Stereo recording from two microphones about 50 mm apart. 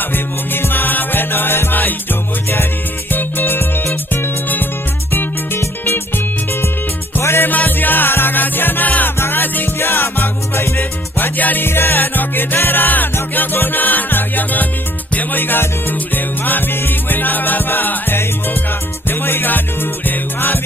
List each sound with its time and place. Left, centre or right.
0.1 s music: left
3.1 s music: left
5.9 s music: left
7.5 s music: left
9.7 s music: left
10.8 s music: left
11.6 s music: left